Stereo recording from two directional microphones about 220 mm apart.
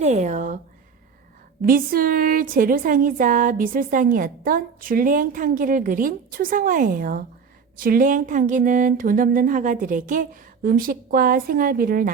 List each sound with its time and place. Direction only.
0.0 s speech: 30° right (ahead or behind)
1.6 s a woman's voice: 40° right (ahead or behind)